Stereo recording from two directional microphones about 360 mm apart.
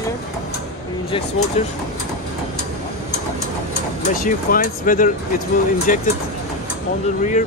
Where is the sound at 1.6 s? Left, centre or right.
Centre.